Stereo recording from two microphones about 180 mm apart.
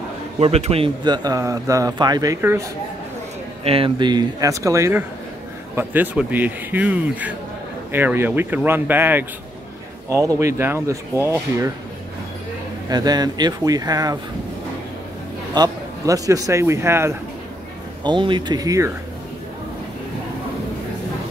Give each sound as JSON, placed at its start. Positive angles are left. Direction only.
{"t": 0.4, "sound": "a man's voice", "side_deg": -35}
{"t": 3.6, "sound": "a man's voice", "side_deg": -30}
{"t": 12.9, "sound": "a man's voice", "side_deg": -20}
{"t": 15.5, "sound": "a man's voice", "side_deg": -20}
{"t": 18.0, "sound": "a man's voice", "side_deg": -25}